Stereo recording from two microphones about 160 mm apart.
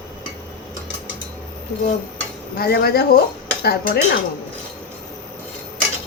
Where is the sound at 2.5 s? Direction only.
70° left (ahead or behind).